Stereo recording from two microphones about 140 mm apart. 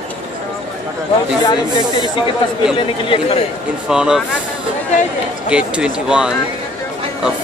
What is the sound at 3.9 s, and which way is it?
Speech, 5° right (ahead or behind).